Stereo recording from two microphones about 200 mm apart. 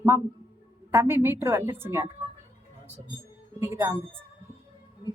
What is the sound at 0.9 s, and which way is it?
Speech, 10° right (ahead or behind).